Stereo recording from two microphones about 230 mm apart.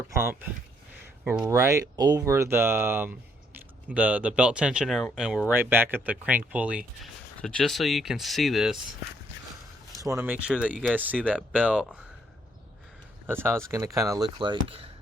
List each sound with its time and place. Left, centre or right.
0.1 s speech: centre
10.0 s speech: centre
13.2 s speech: centre